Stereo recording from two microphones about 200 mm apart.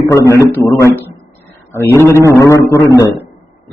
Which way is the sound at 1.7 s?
10° left (ahead or behind).